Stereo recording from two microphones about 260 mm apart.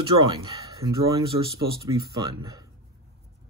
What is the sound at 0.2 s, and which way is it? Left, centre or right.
Speech, centre.